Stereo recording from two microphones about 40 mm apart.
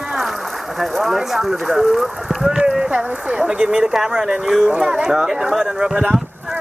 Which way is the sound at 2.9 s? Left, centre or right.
Right.